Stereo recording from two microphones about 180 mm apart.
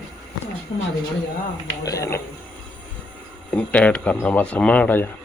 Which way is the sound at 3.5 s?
5° left (ahead or behind).